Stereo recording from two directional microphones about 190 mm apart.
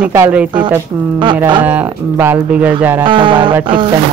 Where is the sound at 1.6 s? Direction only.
10° right (ahead or behind).